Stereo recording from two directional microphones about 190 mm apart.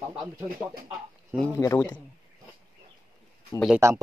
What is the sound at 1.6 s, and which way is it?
Speech, 15° left (ahead or behind).